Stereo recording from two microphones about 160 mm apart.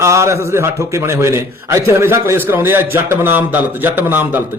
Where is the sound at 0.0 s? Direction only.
20° right (ahead or behind).